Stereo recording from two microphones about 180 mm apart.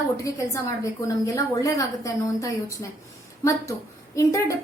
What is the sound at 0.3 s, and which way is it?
A woman's voice, 15° left (ahead or behind).